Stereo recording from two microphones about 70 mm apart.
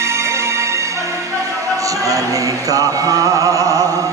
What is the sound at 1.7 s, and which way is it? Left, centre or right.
Chant, right.